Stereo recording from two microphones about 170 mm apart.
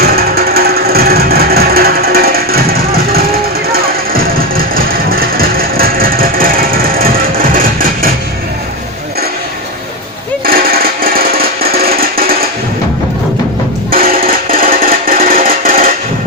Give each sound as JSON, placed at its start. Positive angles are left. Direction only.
{"t": 0.0, "sound": "music", "side_deg": -65}
{"t": 10.4, "sound": "music", "side_deg": -60}
{"t": 13.9, "sound": "music", "side_deg": -60}